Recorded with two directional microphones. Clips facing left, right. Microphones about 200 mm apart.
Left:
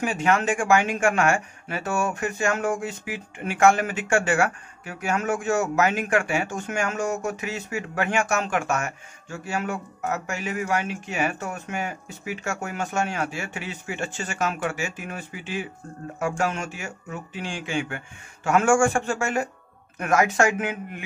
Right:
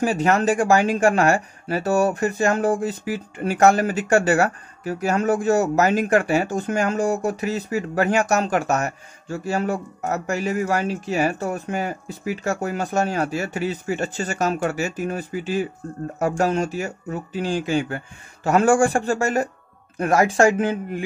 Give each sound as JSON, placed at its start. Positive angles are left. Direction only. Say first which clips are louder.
{"t": 0.0, "sound": "speech", "louder": "right 4 dB", "side_deg": -35}